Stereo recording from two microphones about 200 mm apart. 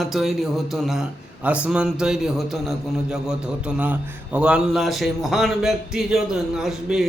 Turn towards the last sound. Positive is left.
turn(degrees=0)  # may be behind; listen again after turning